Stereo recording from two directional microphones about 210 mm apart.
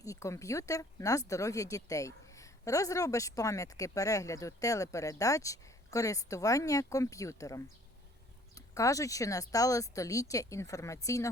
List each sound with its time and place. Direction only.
0.0 s a woman's voice: 15° left (ahead or behind)